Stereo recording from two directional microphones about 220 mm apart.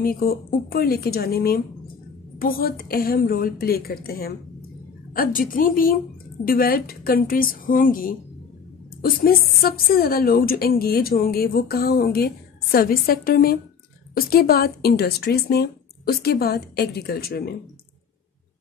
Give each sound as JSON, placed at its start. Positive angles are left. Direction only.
{"t": 0.0, "sound": "a woman's voice", "side_deg": 40}